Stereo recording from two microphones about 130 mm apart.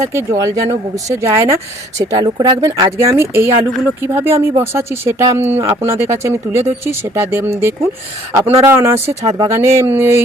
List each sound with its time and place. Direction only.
0.0 s speech: 20° right (ahead or behind)